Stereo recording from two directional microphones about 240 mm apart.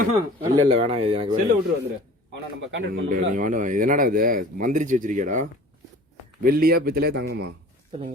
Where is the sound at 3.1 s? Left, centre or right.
Right.